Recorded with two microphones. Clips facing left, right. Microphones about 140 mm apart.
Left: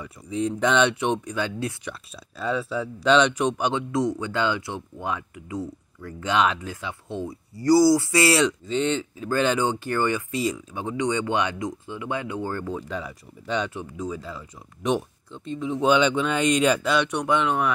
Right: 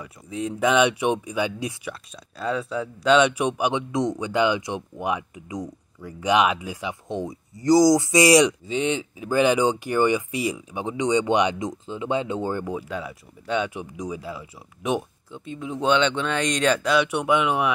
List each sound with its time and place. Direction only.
0.0 s speech: centre (ahead or behind)
1.9 s speech: centre (ahead or behind)
12.9 s speech: centre (ahead or behind)
13.7 s speech: 15° right (ahead or behind)